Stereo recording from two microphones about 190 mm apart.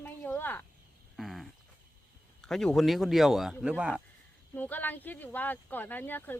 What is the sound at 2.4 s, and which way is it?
Speech, 5° left (ahead or behind).